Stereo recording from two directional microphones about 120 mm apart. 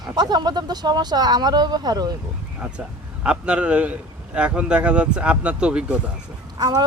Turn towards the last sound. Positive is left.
turn(degrees=-35)  # may be behind; listen again after turning